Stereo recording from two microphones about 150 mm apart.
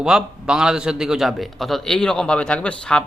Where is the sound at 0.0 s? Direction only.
5° right (ahead or behind).